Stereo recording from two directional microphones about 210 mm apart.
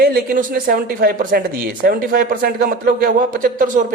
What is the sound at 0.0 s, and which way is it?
A man's voice, 45° right (ahead or behind).